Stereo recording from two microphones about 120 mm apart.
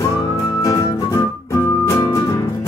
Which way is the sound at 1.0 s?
35° left (ahead or behind).